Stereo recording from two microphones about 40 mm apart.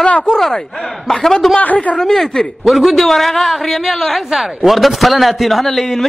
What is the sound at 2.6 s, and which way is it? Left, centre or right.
A man's voice, centre.